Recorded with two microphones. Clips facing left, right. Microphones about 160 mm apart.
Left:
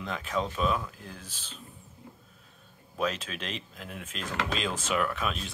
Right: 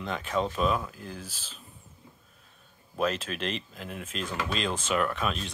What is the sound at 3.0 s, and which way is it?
Speech, centre (ahead or behind).